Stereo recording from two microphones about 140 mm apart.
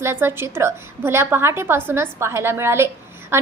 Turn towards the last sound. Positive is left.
turn(degrees=-15)  # may be behind; listen again after turning